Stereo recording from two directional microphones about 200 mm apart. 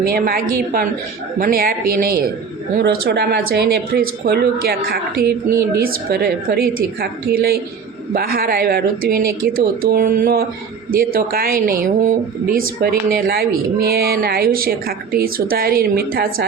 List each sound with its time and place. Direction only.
0.0 s a woman's voice: 50° right (ahead or behind)
2.7 s a woman's voice: 55° right (ahead or behind)